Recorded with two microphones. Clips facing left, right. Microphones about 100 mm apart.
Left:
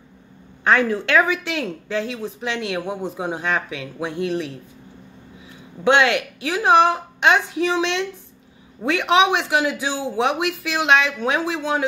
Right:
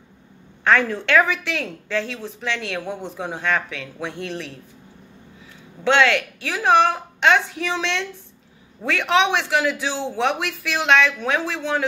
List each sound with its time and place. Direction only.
0.7 s speech: 10° left (ahead or behind)
5.9 s speech: 15° left (ahead or behind)